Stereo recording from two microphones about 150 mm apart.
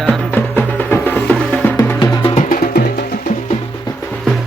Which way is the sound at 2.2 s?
40° left (ahead or behind).